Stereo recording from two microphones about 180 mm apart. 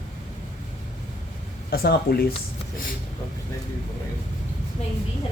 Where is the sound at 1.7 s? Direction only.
60° left (ahead or behind).